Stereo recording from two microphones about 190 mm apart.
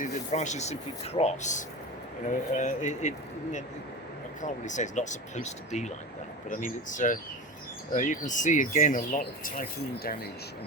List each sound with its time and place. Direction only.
0.0 s speech: 40° left (ahead or behind)